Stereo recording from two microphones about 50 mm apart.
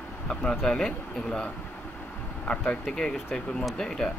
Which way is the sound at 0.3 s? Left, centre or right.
Centre.